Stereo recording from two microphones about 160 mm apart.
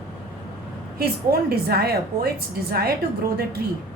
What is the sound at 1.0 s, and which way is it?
A woman's voice, 75° right (ahead or behind).